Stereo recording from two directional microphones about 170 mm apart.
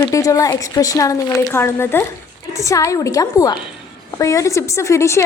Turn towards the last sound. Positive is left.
turn(degrees=15)  # may be behind; listen again after turning